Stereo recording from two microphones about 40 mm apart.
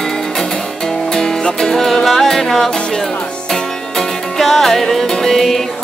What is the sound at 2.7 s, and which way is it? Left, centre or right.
Music, centre.